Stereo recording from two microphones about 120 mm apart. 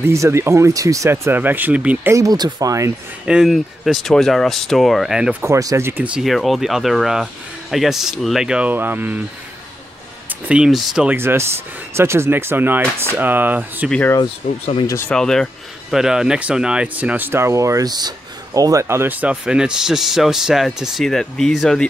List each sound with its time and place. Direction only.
0.0 s speech: 25° right (ahead or behind)
2.1 s speech: 30° right (ahead or behind)
3.3 s speech: 5° right (ahead or behind)
5.4 s speech: 25° right (ahead or behind)
10.5 s speech: 5° right (ahead or behind)
11.1 s speech: 20° right (ahead or behind)
15.0 s speech: 5° left (ahead or behind)